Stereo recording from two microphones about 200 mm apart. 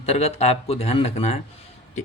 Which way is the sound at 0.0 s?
30° left (ahead or behind).